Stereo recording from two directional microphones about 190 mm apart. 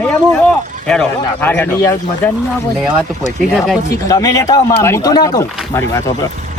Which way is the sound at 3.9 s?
15° left (ahead or behind).